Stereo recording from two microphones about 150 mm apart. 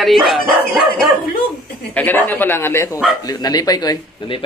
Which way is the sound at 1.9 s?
15° left (ahead or behind).